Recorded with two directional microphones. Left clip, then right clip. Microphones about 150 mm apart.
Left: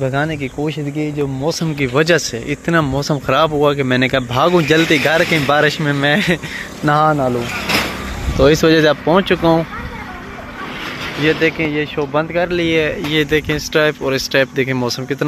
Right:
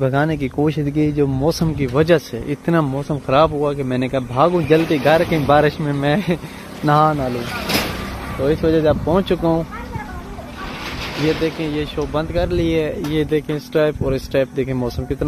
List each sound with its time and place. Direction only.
0.0 s speech: 25° right (ahead or behind)
0.4 s speech: 50° right (ahead or behind)
1.6 s speech: 5° right (ahead or behind)
2.9 s speech: 5° left (ahead or behind)
7.2 s speech: 30° left (ahead or behind)
8.4 s speech: 50° left (ahead or behind)
9.0 s speech: 10° right (ahead or behind)
11.2 s speech: 5° left (ahead or behind)
12.4 s speech: 15° right (ahead or behind)